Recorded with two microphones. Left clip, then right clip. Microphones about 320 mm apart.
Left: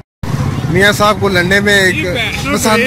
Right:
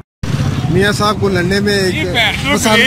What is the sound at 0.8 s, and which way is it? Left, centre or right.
Speech, centre.